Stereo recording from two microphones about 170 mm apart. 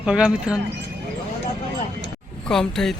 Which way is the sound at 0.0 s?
5° right (ahead or behind).